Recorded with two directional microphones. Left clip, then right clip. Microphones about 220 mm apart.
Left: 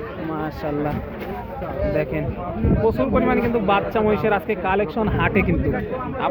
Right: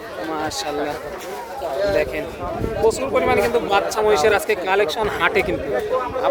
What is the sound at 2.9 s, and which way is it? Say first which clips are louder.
A man's voice: right 2 dB; 15° right (ahead or behind).